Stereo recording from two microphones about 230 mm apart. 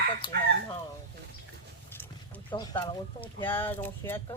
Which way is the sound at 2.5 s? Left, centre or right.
Centre.